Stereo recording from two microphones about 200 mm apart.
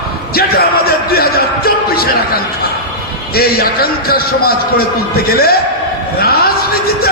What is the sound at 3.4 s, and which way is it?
A man's voice, 50° left (ahead or behind).